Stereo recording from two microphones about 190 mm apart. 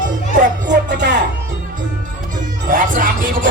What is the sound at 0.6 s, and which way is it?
Music, 65° right (ahead or behind).